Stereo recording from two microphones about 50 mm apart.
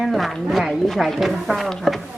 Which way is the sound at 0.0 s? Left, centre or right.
Centre.